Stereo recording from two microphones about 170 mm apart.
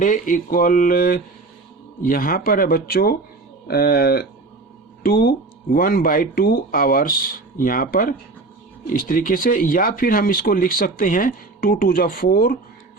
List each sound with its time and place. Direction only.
0.0 s speech: 50° left (ahead or behind)